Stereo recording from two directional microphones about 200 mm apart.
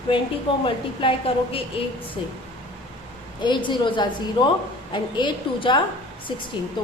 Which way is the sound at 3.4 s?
25° left (ahead or behind).